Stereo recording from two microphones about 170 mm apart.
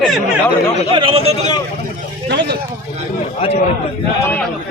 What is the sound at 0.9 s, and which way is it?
Speech, 35° right (ahead or behind).